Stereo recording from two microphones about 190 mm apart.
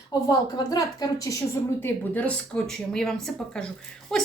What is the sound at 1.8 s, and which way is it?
A woman's voice, 10° left (ahead or behind).